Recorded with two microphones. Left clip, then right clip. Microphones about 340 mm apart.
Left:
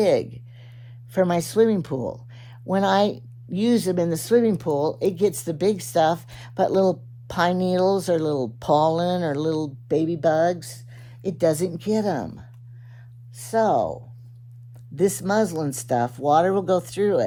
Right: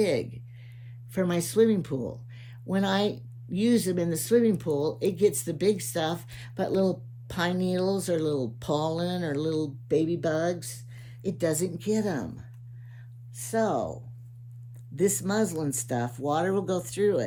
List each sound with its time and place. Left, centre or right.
0.0 s speech: centre